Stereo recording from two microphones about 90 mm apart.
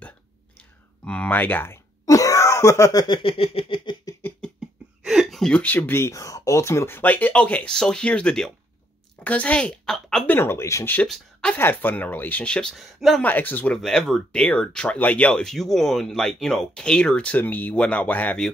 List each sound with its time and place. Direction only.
1.0 s speech: 15° left (ahead or behind)
2.0 s wail: 35° left (ahead or behind)
3.1 s a sound: 75° left (ahead or behind)
5.0 s a sound: 5° right (ahead or behind)
5.5 s a woman's voice: 15° left (ahead or behind)
10.2 s speech: 25° left (ahead or behind)
12.7 s speech: centre (ahead or behind)
13.2 s speech: 20° left (ahead or behind)
13.7 s speech: 5° left (ahead or behind)